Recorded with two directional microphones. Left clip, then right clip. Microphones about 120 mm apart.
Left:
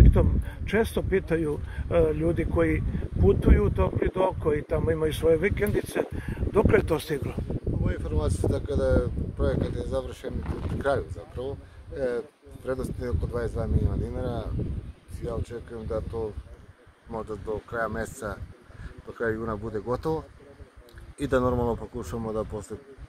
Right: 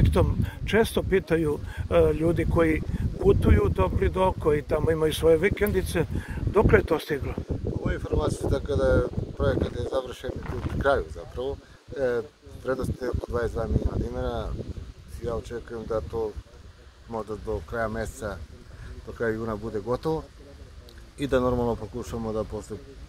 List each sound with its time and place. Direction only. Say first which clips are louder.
0.0 s speech: right 1 dB; 15° right (ahead or behind)
6.2 s speech: right 2 dB; centre (ahead or behind)
6.9 s speech: right 1 dB; 15° left (ahead or behind)
7.8 s speech: right 5 dB; centre (ahead or behind)
19.3 s speech: right 1 dB; 10° right (ahead or behind)